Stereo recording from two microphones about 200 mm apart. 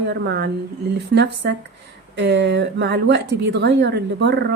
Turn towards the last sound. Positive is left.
turn(degrees=-55)  # may be behind; listen again after turning